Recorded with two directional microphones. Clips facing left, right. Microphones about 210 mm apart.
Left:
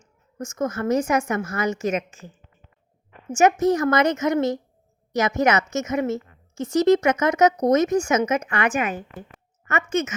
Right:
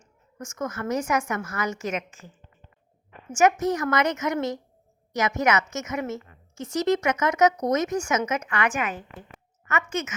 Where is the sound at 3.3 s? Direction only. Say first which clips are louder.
Left 3 dB; 30° left (ahead or behind).